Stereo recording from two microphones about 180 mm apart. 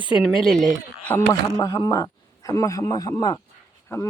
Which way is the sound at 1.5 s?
20° left (ahead or behind).